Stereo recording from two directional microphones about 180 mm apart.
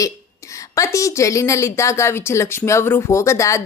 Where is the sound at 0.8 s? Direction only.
15° left (ahead or behind).